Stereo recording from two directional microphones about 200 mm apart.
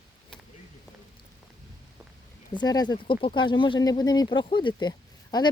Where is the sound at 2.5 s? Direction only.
20° left (ahead or behind).